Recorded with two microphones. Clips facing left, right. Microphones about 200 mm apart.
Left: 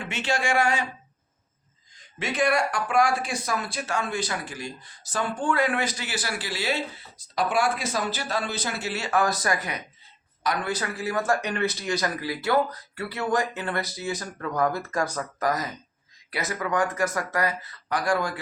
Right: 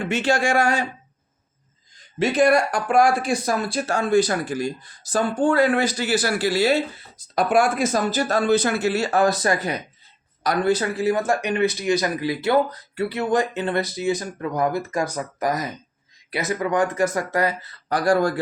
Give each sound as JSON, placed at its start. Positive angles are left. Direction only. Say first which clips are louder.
{"t": 0.1, "sound": "speech", "louder": "right 5 dB", "side_deg": -40}
{"t": 2.1, "sound": "speech", "louder": "right 7 dB", "side_deg": -35}